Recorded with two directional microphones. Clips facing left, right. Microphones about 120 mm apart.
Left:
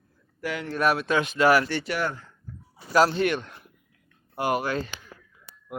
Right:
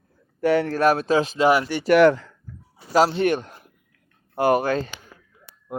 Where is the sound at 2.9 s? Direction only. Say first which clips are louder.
Right 2 dB; 30° right (ahead or behind).